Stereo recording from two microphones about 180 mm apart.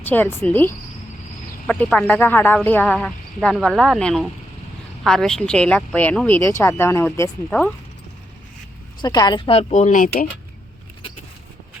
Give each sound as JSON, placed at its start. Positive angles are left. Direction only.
{"t": 0.0, "sound": "speech", "side_deg": 10}
{"t": 9.0, "sound": "speech", "side_deg": 20}